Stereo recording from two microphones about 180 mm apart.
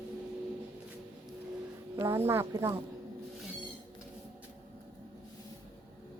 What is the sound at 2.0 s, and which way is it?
Speech, 15° right (ahead or behind).